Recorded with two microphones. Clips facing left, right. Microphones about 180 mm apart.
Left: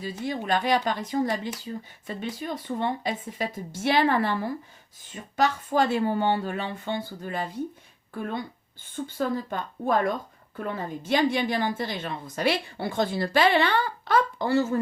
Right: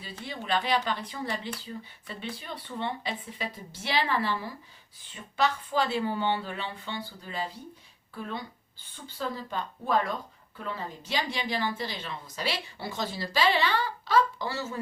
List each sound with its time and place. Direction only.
0.0 s a woman's voice: 45° left (ahead or behind)